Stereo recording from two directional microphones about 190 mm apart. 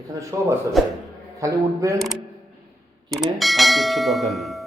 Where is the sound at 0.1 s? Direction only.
15° right (ahead or behind).